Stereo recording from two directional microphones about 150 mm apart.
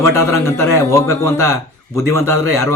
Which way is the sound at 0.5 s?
20° left (ahead or behind).